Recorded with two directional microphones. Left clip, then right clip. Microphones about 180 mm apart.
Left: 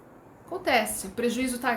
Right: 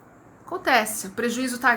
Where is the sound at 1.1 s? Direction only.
35° left (ahead or behind).